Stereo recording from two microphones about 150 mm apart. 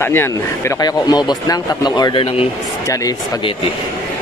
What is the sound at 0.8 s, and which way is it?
Speech, 25° left (ahead or behind).